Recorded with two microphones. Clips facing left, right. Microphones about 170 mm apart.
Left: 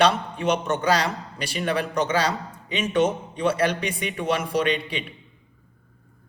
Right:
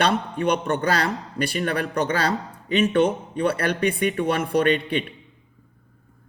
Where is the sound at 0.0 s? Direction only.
55° right (ahead or behind).